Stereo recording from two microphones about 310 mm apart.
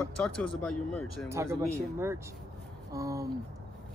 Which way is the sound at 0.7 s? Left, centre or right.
Centre.